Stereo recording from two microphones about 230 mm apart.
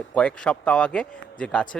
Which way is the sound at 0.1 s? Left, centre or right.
Centre.